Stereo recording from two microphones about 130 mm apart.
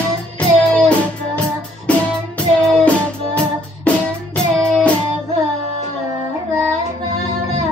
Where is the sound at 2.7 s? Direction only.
10° left (ahead or behind).